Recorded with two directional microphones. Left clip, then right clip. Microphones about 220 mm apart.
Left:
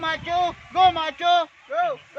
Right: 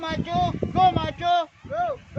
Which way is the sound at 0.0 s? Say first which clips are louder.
Left 2 dB; 30° left (ahead or behind).